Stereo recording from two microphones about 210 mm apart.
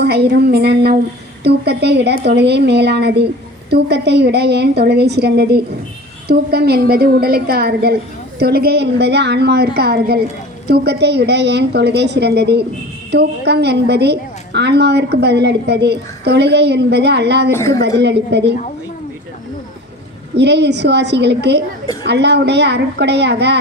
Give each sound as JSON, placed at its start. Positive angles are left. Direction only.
{"t": 0.0, "sound": "a woman's voice", "side_deg": -50}
{"t": 17.5, "sound": "a woman's voice", "side_deg": 15}
{"t": 17.7, "sound": "a woman's voice", "side_deg": -55}
{"t": 20.3, "sound": "a woman's voice", "side_deg": -55}